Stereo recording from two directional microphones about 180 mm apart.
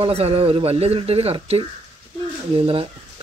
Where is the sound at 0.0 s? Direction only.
35° right (ahead or behind).